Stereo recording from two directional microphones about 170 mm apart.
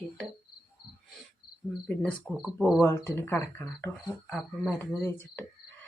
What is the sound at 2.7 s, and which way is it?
Speech, 15° left (ahead or behind).